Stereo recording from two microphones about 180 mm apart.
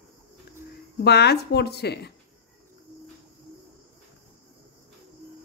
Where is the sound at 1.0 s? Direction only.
65° left (ahead or behind).